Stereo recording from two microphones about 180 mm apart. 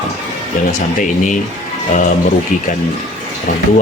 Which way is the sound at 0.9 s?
45° left (ahead or behind).